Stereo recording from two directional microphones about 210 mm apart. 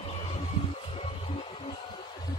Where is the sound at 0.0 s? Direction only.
30° left (ahead or behind).